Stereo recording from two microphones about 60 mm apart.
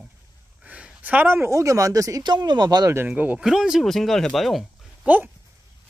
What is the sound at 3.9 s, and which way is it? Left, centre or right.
Speech, centre.